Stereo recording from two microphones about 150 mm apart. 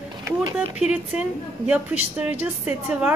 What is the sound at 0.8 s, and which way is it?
A woman's voice, 10° right (ahead or behind).